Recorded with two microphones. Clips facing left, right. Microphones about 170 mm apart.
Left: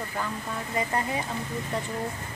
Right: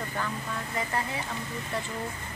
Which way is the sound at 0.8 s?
20° left (ahead or behind).